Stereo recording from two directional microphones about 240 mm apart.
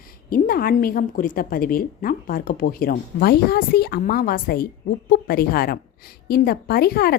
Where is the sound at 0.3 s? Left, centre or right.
Left.